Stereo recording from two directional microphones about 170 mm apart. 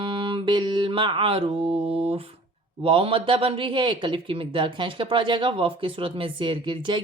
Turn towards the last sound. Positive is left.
turn(degrees=-30)  # may be behind; listen again after turning